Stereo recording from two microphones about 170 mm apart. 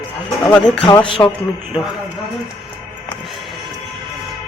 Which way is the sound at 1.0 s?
30° left (ahead or behind).